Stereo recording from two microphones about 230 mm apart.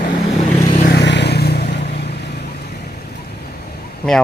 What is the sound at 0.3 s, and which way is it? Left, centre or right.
Vehicle, left.